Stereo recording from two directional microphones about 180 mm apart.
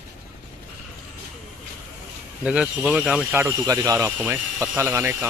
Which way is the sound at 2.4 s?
5° right (ahead or behind).